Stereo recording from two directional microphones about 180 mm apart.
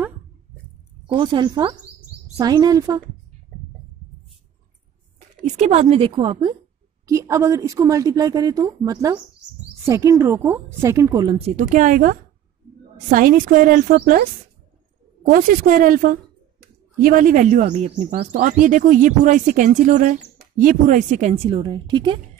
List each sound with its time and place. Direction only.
1.0 s a woman's voice: 25° right (ahead or behind)
5.6 s a woman's voice: 35° right (ahead or behind); by 11.3 s 20° right (ahead or behind)
11.3 s a woman's voice: 35° right (ahead or behind)
11.6 s speech: 45° right (ahead or behind)
15.2 s a woman's voice: 50° right (ahead or behind)
18.3 s a woman's voice: 45° right (ahead or behind); by 22.2 s 25° right (ahead or behind)